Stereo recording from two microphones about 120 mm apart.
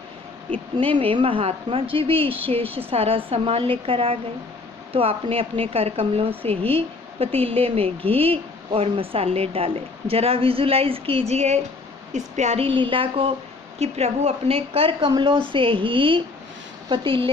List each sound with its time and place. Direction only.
0.8 s speech: 50° right (ahead or behind)
12.1 s speech: 75° right (ahead or behind); by 13.3 s 50° right (ahead or behind)
13.7 s a woman's voice: 60° right (ahead or behind)